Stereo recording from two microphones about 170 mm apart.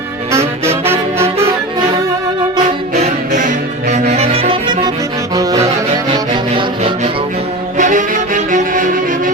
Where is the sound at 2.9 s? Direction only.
45° right (ahead or behind).